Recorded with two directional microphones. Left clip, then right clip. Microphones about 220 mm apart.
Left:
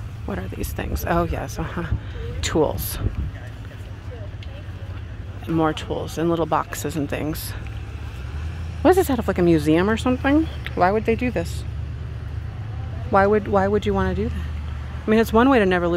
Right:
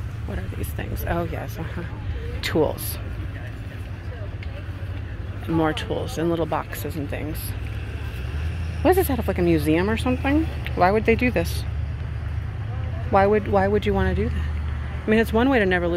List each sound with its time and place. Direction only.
0.3 s speech: 25° left (ahead or behind)
5.6 s speech: 10° left (ahead or behind)
8.8 s speech: 15° left (ahead or behind)
13.1 s speech: 15° left (ahead or behind)